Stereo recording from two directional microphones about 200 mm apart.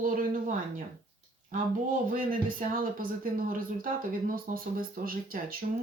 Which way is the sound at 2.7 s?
45° right (ahead or behind).